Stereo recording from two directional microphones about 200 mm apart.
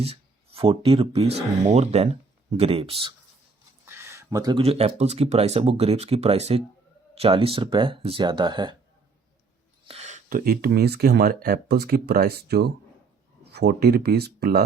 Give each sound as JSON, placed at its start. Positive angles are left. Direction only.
{"t": 0.0, "sound": "speech", "side_deg": -30}
{"t": 3.8, "sound": "speech", "side_deg": -15}
{"t": 9.8, "sound": "a sound", "side_deg": -30}
{"t": 10.2, "sound": "speech", "side_deg": -45}